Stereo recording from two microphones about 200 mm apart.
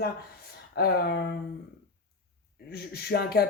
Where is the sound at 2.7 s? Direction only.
50° left (ahead or behind).